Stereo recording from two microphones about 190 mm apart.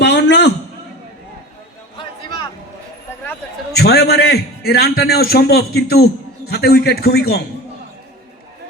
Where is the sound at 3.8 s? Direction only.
60° left (ahead or behind).